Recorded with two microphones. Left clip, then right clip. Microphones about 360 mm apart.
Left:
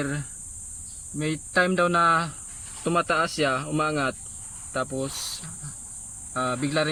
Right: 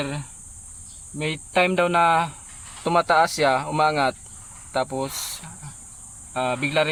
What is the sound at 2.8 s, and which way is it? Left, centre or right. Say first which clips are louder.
Speech: right 5 dB; right.